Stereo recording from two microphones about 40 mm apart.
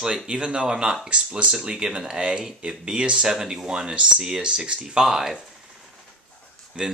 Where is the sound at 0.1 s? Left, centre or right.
Right.